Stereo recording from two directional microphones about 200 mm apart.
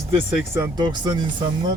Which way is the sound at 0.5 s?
15° right (ahead or behind).